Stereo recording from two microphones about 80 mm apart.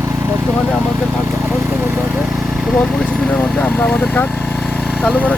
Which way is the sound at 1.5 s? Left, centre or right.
Right.